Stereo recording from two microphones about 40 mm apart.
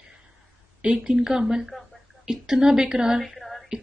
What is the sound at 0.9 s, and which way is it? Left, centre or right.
Speech, centre.